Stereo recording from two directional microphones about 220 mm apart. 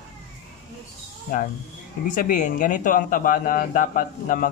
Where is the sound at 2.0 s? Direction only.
35° left (ahead or behind).